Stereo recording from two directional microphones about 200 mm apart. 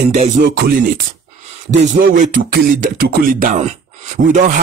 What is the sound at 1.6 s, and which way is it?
Music, 40° right (ahead or behind).